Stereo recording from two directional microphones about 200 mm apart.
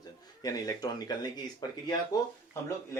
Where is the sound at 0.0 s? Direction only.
20° left (ahead or behind).